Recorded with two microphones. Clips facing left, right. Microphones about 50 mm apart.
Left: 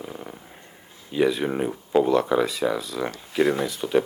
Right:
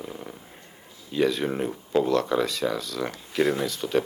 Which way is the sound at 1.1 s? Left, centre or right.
Centre.